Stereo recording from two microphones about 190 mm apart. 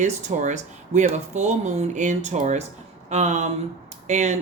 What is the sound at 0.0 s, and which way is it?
Speech, 40° right (ahead or behind).